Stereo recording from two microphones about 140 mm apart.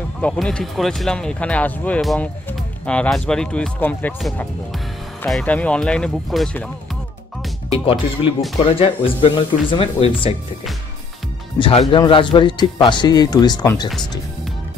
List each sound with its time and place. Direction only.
0.2 s speech: 5° left (ahead or behind)
5.3 s speech: 10° left (ahead or behind)
7.7 s speech: 40° left (ahead or behind)
11.5 s speech: 40° left (ahead or behind)